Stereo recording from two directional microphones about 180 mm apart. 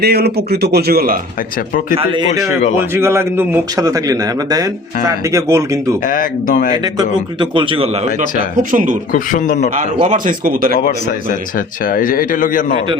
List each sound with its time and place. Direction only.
0.0 s speech: 60° right (ahead or behind)
2.0 s a man's voice: 25° right (ahead or behind)
2.7 s a man's voice: 15° right (ahead or behind)
6.1 s speech: 50° left (ahead or behind)
6.8 s a man's voice: 25° right (ahead or behind)
8.5 s speech: 45° right (ahead or behind)
9.1 s speech: 45° left (ahead or behind)
9.7 s speech: 45° right (ahead or behind)
10.8 s speech: 50° left (ahead or behind)